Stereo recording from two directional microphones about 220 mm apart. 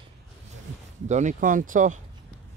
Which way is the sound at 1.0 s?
35° right (ahead or behind).